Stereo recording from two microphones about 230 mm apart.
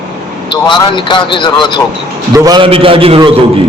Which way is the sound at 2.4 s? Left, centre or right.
Centre.